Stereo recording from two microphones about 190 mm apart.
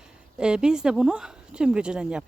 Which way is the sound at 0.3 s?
5° right (ahead or behind).